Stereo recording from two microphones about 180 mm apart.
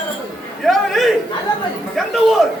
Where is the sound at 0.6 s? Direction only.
Centre (ahead or behind).